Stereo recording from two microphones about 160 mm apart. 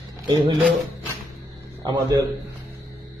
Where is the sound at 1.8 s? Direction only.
25° right (ahead or behind).